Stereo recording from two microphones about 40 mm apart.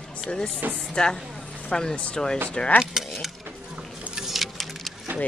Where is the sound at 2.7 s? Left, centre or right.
Centre.